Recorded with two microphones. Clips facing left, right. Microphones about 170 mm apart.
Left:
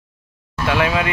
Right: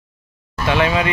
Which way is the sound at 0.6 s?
Centre (ahead or behind).